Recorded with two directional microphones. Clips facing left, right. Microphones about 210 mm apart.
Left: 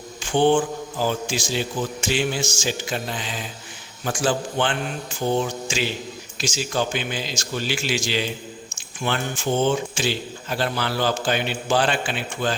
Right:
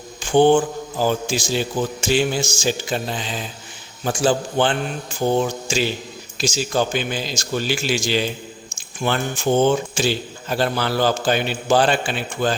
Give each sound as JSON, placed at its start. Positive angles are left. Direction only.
{"t": 0.2, "sound": "mantra", "side_deg": -45}
{"t": 0.9, "sound": "a man's voice", "side_deg": -40}
{"t": 6.3, "sound": "a man's voice", "side_deg": -35}